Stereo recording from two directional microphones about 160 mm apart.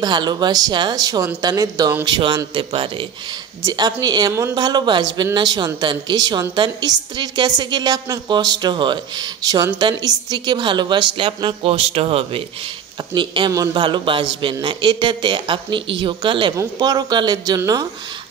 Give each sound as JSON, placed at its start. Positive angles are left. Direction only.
{"t": 0.0, "sound": "a man's voice", "side_deg": -25}